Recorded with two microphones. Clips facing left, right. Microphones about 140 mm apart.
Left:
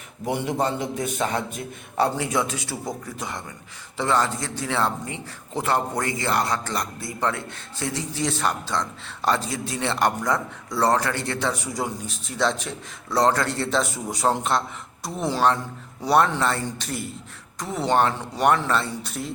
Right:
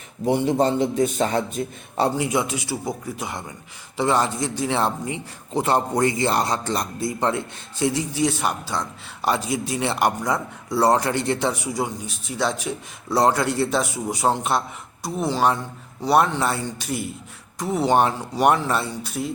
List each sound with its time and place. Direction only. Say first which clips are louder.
0.3 s a man's voice: right 5 dB; 30° right (ahead or behind)
2.1 s a man's voice: right 2 dB; 15° right (ahead or behind)
11.7 s a man's voice: right 2 dB; 5° right (ahead or behind)